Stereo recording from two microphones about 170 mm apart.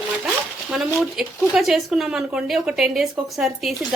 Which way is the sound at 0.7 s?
Centre (ahead or behind).